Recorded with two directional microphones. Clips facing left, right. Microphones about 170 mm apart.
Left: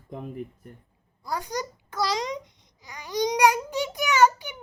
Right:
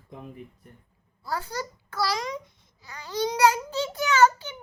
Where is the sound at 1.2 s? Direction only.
15° left (ahead or behind).